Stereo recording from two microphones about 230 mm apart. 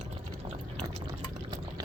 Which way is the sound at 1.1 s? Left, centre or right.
Centre.